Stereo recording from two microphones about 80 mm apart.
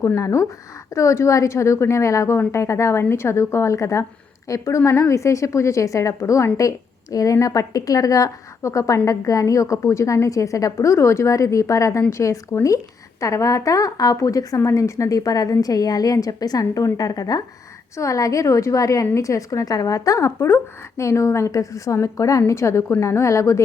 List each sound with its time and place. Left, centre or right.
0.0 s a woman's voice: left
20.4 s a woman's voice: left